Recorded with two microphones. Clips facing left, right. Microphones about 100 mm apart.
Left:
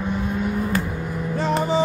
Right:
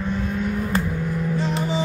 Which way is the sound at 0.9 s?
5° left (ahead or behind).